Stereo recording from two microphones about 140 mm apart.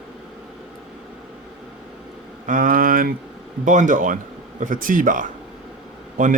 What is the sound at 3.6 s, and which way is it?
Speech, 60° right (ahead or behind).